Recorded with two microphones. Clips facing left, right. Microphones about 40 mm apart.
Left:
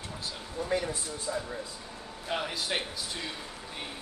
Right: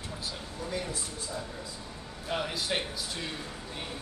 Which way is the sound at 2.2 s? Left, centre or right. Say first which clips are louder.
Even; centre.